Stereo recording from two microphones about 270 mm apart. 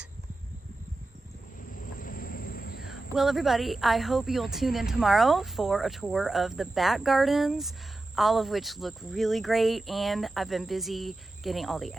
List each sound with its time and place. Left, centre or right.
1.7 s vehicle: left
2.8 s a woman's voice: centre